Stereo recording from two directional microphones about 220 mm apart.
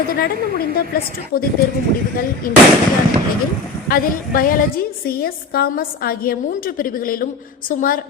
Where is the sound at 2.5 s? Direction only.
40° left (ahead or behind).